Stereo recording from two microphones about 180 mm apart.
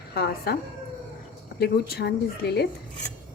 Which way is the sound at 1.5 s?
65° left (ahead or behind).